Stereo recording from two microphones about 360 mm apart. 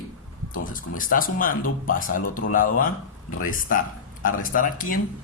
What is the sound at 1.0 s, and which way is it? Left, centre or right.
Speech, left.